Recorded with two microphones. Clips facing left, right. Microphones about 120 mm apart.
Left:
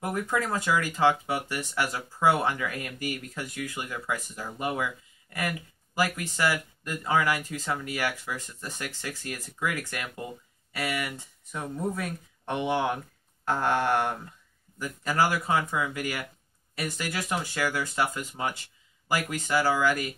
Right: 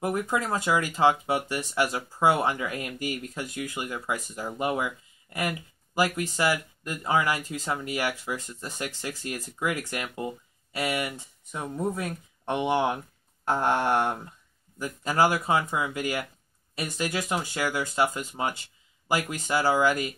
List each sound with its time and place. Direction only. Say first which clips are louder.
0.1 s speech: right 1 dB; 20° right (ahead or behind)